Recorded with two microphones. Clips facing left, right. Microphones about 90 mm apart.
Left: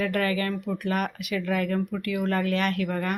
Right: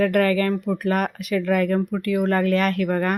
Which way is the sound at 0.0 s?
45° right (ahead or behind).